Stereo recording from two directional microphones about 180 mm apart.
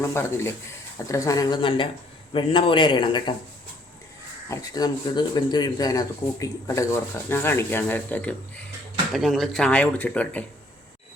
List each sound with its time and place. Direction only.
0.0 s a man's voice: 15° left (ahead or behind)
4.4 s speech: 20° left (ahead or behind)